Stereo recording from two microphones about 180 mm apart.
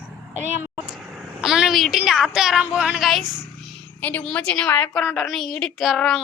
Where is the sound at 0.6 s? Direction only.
5° right (ahead or behind).